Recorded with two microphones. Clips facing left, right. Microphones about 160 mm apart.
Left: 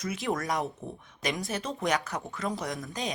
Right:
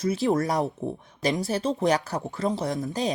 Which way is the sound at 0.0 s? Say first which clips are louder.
Right 8 dB; 35° right (ahead or behind).